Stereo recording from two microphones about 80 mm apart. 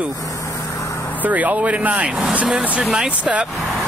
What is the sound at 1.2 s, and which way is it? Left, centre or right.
Speech, centre.